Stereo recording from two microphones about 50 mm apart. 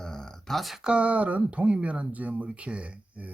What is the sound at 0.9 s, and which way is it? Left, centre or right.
Speech, right.